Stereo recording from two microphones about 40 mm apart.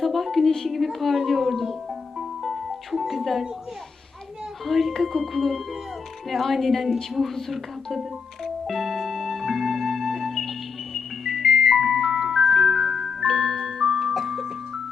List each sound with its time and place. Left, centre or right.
0.0 s a sound: centre
1.2 s music: centre
4.6 s a woman's voice: centre
8.4 s music: centre